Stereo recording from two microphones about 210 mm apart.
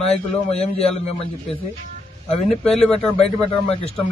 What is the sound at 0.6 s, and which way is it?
Speech, 30° left (ahead or behind).